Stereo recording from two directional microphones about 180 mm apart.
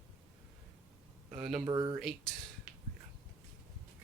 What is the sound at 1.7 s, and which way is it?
Speech, 20° right (ahead or behind).